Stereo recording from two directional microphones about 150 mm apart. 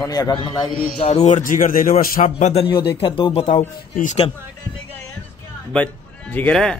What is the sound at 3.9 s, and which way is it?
Speech, 55° left (ahead or behind).